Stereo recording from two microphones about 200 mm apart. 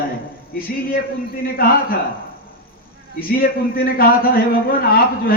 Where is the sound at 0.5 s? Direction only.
45° left (ahead or behind).